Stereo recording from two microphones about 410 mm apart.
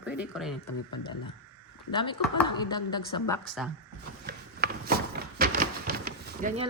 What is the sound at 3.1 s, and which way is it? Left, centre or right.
Speech, left.